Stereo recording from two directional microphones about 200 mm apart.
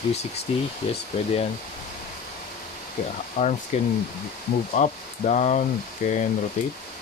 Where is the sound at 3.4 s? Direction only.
40° left (ahead or behind).